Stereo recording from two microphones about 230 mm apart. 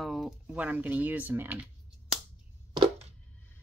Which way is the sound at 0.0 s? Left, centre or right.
Centre.